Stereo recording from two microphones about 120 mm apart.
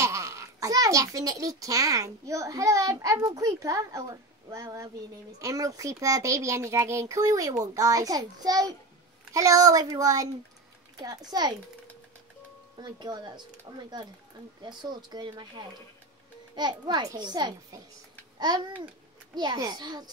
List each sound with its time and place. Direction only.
0.0 s a child's voice: 25° right (ahead or behind)
12.7 s a child's voice: 35° right (ahead or behind)
19.3 s a child's voice: 35° right (ahead or behind)